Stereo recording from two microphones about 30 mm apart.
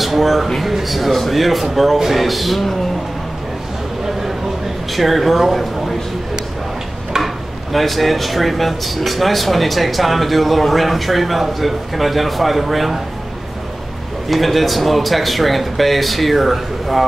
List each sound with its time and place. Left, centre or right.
0.0 s a man's voice: centre
4.9 s speech: centre
7.2 s stir: centre
7.7 s speech: centre
14.3 s speech: centre